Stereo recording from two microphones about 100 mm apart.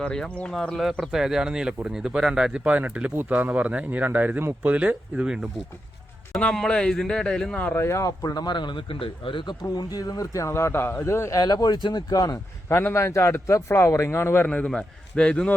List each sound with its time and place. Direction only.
0.0 s speech: 10° left (ahead or behind); by 5.5 s 10° right (ahead or behind)
6.4 s speech: 10° left (ahead or behind)
7.6 s speech: 20° left (ahead or behind)
11.3 s speech: 40° left (ahead or behind)
12.6 s a man's voice: 25° left (ahead or behind)
14.5 s speech: 10° left (ahead or behind)